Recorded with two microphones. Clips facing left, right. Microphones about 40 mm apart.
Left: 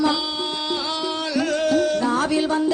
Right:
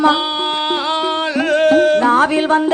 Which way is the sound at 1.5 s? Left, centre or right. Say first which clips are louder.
Right 10 dB; right.